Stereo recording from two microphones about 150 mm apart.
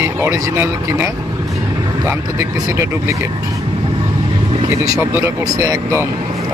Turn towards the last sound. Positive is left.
turn(degrees=-20)  # may be behind; listen again after turning